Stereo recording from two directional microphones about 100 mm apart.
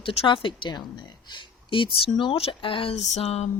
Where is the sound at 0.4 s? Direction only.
50° left (ahead or behind); by 3.4 s 90° left.